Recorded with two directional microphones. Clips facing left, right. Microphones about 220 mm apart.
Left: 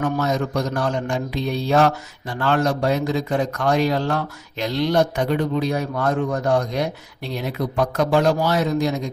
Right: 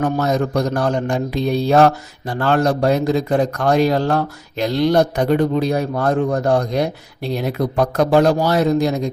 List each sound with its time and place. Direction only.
0.0 s a man's voice: 40° right (ahead or behind)